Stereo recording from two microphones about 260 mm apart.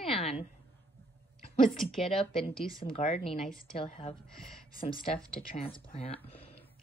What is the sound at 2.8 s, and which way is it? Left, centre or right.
Speech, left.